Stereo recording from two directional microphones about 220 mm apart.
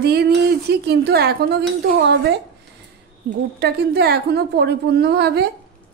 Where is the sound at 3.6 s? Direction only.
45° right (ahead or behind).